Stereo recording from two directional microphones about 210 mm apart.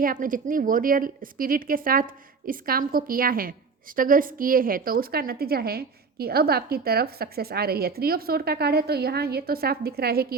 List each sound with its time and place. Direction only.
0.0 s a woman's voice: 40° right (ahead or behind)